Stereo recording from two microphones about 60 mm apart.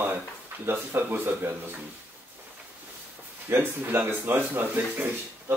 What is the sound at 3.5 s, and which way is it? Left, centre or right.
Speech, right.